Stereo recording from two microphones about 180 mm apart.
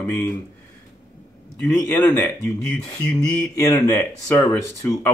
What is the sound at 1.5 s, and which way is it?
Speech, 10° left (ahead or behind).